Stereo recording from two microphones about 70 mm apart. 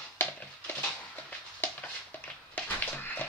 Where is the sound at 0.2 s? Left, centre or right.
Left.